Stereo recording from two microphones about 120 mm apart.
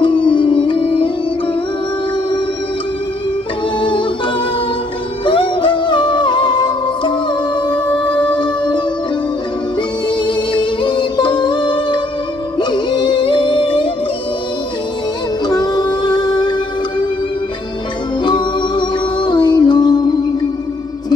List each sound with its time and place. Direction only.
0.0 s music: 45° left (ahead or behind)
5.2 s music: 45° left (ahead or behind)
10.0 s music: 45° left (ahead or behind)
15.4 s music: 35° left (ahead or behind)
18.2 s music: 40° left (ahead or behind)